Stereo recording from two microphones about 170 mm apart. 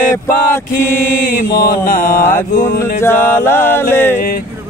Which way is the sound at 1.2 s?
55° left (ahead or behind).